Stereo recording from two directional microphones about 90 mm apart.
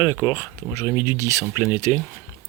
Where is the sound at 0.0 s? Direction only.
25° left (ahead or behind).